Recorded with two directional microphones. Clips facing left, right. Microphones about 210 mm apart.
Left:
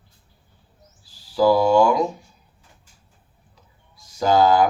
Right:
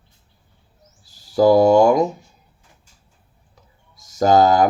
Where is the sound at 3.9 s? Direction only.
45° right (ahead or behind).